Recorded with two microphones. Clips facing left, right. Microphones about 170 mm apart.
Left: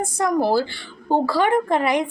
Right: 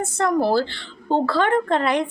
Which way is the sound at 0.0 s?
15° left (ahead or behind).